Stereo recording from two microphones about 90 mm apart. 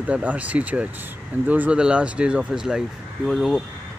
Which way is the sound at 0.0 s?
15° right (ahead or behind).